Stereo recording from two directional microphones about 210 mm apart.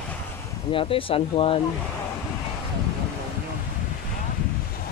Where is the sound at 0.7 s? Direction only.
25° left (ahead or behind).